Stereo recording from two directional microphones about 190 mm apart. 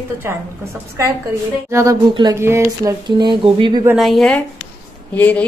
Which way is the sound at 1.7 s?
20° right (ahead or behind).